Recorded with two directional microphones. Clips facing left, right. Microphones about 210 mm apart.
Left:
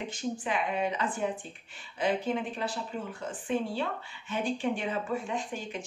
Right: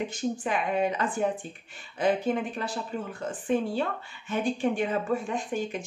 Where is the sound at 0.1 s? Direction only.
45° right (ahead or behind).